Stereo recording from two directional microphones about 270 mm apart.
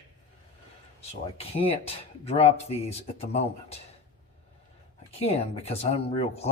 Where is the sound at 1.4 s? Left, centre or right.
Left.